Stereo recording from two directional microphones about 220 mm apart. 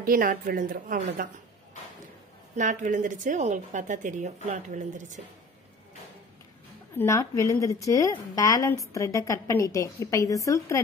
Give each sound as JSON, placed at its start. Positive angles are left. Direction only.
{"t": 0.0, "sound": "speech", "side_deg": -40}
{"t": 2.5, "sound": "speech", "side_deg": -35}
{"t": 7.0, "sound": "a woman's voice", "side_deg": 10}